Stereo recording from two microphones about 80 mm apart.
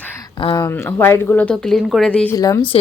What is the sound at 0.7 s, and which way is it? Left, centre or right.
Speech, left.